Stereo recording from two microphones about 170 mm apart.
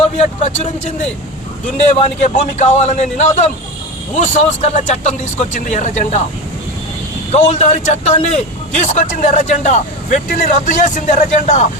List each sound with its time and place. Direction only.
0.0 s a man's voice: 40° left (ahead or behind)
2.0 s a man's voice: 45° left (ahead or behind)
7.3 s speech: 45° left (ahead or behind)